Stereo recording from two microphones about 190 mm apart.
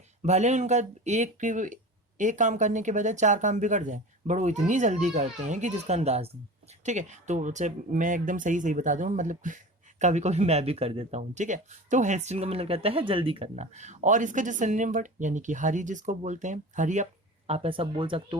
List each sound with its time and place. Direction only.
0.2 s speech: 35° right (ahead or behind)